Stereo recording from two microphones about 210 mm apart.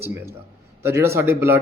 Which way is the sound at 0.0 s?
10° right (ahead or behind).